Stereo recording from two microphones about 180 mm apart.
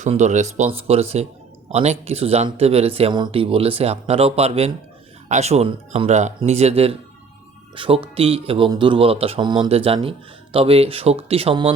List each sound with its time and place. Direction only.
0.0 s speech: 40° right (ahead or behind)